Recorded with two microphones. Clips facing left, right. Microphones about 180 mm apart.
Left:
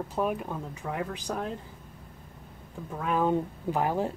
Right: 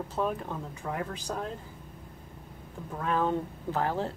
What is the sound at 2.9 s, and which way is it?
Speech, 10° left (ahead or behind).